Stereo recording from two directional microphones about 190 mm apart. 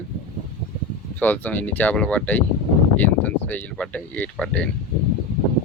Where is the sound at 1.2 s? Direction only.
10° left (ahead or behind).